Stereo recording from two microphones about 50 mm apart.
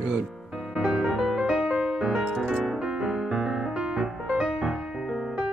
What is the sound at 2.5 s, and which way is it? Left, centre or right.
Piano, centre.